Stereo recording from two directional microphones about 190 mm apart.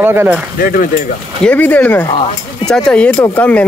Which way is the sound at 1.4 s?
5° left (ahead or behind).